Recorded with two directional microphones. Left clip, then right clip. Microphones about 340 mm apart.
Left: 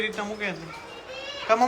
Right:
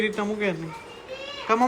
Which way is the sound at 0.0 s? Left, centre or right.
Centre.